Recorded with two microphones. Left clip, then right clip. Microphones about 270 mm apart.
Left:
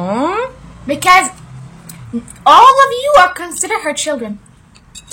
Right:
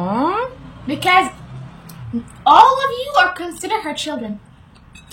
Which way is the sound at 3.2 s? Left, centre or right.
Centre.